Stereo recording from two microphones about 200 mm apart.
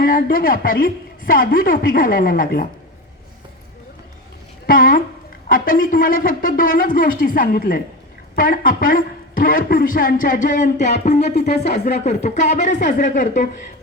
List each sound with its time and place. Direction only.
0.0 s a man's voice: 45° left (ahead or behind)
4.6 s a sound: 45° left (ahead or behind)
5.5 s a man's voice: 45° left (ahead or behind)